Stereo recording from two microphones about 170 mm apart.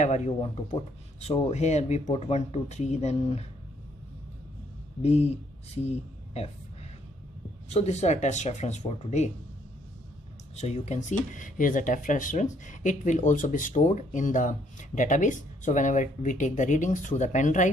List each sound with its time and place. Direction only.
0.0 s speech: 45° left (ahead or behind)
5.0 s speech: 40° left (ahead or behind)
6.3 s a sound: 35° left (ahead or behind)
7.7 s speech: 40° left (ahead or behind)
10.5 s speech: 40° left (ahead or behind)